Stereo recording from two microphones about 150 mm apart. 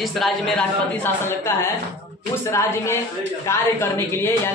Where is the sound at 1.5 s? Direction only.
15° left (ahead or behind).